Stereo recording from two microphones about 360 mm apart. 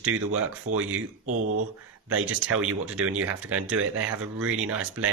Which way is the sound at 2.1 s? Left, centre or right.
Right.